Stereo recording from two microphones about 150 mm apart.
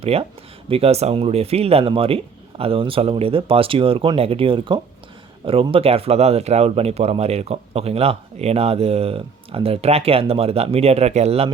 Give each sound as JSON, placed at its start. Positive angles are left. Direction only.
{"t": 0.0, "sound": "speech", "side_deg": -40}